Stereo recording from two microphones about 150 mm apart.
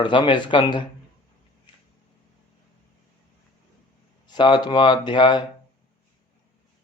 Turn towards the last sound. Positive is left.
turn(degrees=30)  # may be behind; listen again after turning